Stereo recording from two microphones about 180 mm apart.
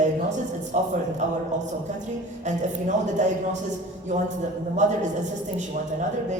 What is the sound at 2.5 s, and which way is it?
A woman's voice, 45° right (ahead or behind).